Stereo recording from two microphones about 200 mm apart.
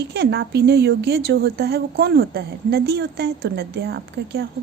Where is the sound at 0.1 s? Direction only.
55° right (ahead or behind).